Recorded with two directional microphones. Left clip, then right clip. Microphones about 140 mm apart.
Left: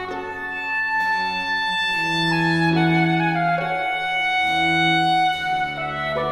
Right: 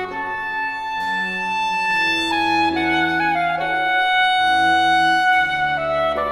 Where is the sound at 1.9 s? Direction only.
25° right (ahead or behind).